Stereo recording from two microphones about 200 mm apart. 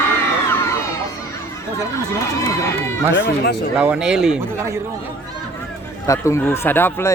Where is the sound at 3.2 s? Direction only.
55° left (ahead or behind).